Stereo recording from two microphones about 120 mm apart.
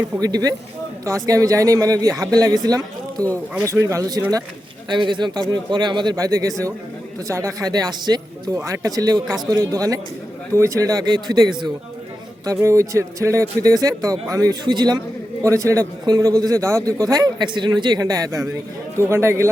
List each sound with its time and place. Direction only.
0.2 s a man's voice: 30° right (ahead or behind)
4.9 s a man's voice: 40° right (ahead or behind)
12.5 s a man's voice: 25° right (ahead or behind)